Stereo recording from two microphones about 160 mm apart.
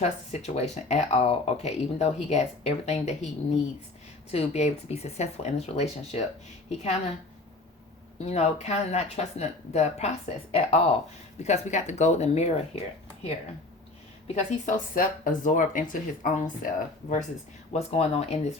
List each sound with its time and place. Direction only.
0.0 s speech: 45° left (ahead or behind)
4.3 s speech: 45° left (ahead or behind)
8.2 s speech: 40° left (ahead or behind)
14.3 s speech: 50° left (ahead or behind)
17.7 s speech: 40° left (ahead or behind)